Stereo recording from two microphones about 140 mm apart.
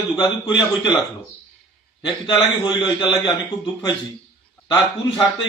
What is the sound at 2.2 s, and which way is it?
A man's voice, 30° left (ahead or behind).